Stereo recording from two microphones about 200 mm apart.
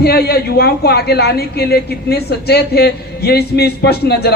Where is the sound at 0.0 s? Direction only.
50° left (ahead or behind).